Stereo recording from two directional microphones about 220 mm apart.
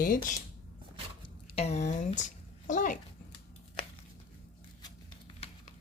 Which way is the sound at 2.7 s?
35° left (ahead or behind).